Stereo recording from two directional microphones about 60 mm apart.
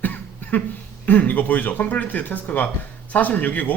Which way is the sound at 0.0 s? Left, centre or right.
Left.